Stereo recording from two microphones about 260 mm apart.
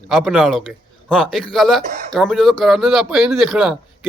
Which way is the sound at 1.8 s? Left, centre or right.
Right.